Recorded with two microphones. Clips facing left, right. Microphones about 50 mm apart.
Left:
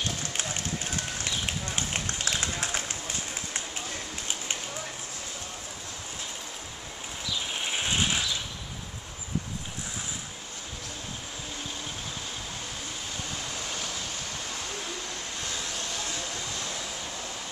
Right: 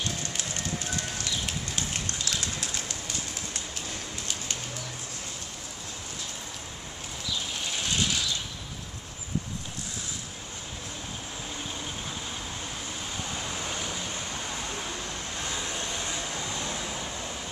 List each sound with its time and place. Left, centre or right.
1.2 s run: left
7.5 s a sound: left
13.5 s vehicle: centre
15.4 s vehicle: right